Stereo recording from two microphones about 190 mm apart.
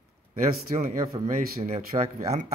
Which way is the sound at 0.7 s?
35° right (ahead or behind).